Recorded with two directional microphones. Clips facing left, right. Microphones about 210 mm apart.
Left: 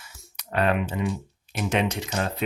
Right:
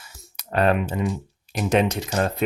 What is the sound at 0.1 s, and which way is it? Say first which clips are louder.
Computer keyboard: right 3 dB; 40° right (ahead or behind).